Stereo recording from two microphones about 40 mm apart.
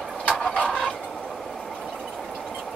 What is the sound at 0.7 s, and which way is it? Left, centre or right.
Fowl, centre.